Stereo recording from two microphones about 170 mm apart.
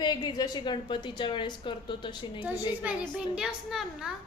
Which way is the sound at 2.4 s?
10° right (ahead or behind).